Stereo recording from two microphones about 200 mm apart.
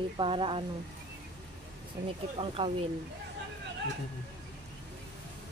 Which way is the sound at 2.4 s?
25° right (ahead or behind).